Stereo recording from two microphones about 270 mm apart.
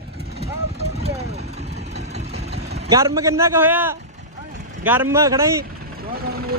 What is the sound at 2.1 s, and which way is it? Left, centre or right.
Engine, right.